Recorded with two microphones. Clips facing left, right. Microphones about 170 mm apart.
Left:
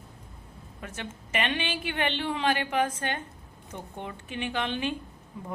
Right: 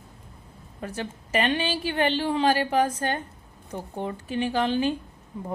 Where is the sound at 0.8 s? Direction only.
35° right (ahead or behind).